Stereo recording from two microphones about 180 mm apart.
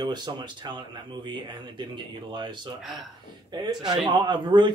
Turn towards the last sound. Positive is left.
turn(degrees=-25)  # may be behind; listen again after turning